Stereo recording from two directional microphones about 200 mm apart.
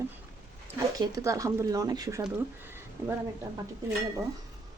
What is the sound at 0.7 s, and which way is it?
Speech, 15° right (ahead or behind).